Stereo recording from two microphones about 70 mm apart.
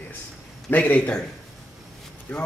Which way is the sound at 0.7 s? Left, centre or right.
Left.